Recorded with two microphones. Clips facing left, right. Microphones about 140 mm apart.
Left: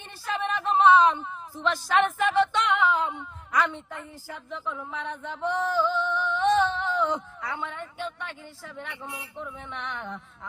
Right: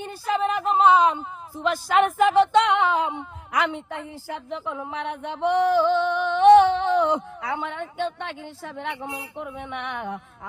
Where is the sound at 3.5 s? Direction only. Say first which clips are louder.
Right 2 dB; 75° right (ahead or behind).